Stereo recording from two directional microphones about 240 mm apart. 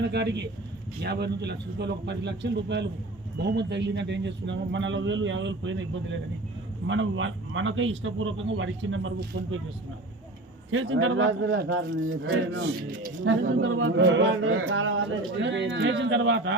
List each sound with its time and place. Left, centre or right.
0.0 s a man's voice: right
10.7 s a man's voice: right